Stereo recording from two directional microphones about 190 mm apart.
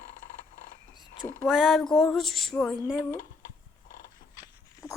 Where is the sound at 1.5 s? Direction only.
Centre (ahead or behind).